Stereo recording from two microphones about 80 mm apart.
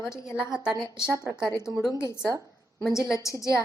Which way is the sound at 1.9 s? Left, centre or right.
Left.